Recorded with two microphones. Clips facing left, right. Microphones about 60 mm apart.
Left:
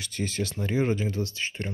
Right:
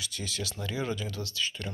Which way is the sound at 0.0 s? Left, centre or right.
Left.